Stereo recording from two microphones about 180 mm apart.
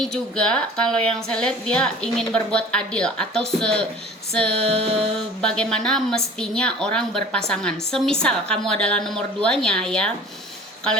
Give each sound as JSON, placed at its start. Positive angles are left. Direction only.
{"t": 0.0, "sound": "a woman's voice", "side_deg": 5}
{"t": 4.3, "sound": "female singing", "side_deg": 5}
{"t": 4.5, "sound": "music", "side_deg": -35}
{"t": 5.4, "sound": "a woman's voice", "side_deg": 5}